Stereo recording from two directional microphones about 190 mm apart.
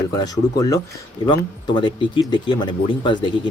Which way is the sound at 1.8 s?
25° left (ahead or behind).